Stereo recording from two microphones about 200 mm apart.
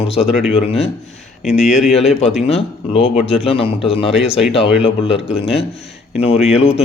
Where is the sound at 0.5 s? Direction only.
30° left (ahead or behind).